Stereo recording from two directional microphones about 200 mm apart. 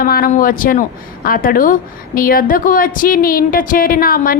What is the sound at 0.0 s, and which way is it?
Speech, 45° left (ahead or behind).